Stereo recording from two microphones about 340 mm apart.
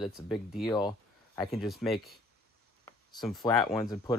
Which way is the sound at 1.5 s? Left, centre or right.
Centre.